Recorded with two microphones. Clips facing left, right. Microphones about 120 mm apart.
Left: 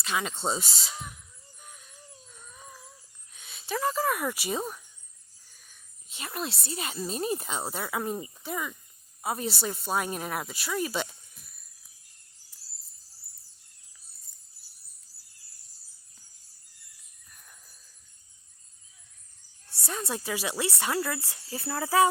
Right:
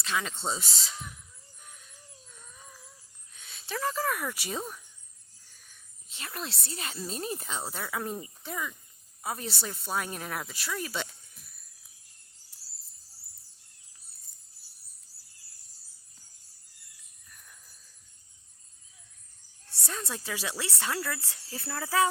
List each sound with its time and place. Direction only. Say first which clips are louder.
0.0 s speech: left 2 dB; 15° left (ahead or behind)
3.3 s speech: left 4 dB; 10° left (ahead or behind)
6.1 s speech: left 4 dB; 15° left (ahead or behind)
19.6 s speech: left 4 dB; 10° left (ahead or behind)